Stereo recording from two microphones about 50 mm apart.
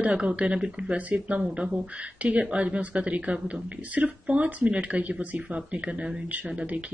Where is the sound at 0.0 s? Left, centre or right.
Right.